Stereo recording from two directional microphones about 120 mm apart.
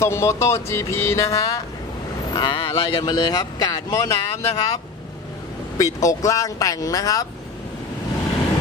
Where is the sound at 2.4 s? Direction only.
40° left (ahead or behind).